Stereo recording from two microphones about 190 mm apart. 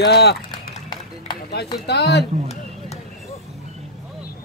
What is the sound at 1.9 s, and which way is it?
Speech, 60° left (ahead or behind).